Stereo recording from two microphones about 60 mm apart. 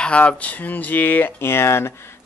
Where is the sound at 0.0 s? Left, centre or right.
Centre.